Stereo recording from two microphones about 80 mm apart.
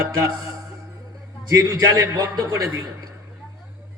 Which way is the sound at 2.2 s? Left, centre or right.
Right.